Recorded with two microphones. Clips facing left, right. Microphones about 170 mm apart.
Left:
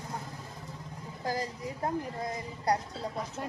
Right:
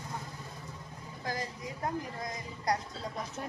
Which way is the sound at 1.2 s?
35° left (ahead or behind).